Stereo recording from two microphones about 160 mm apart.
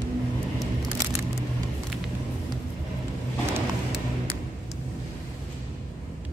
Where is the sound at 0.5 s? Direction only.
Centre (ahead or behind).